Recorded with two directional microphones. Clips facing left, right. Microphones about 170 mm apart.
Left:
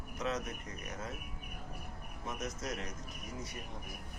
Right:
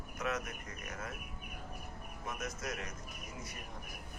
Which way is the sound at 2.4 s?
25° left (ahead or behind).